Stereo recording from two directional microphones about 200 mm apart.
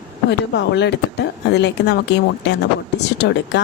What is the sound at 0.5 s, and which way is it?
A woman's voice, 60° left (ahead or behind).